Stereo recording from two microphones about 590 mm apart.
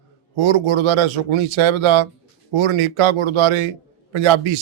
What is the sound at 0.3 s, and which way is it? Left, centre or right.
A man's voice, right.